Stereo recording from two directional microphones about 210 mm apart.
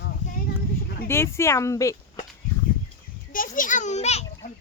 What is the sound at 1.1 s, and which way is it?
Speech, 10° left (ahead or behind).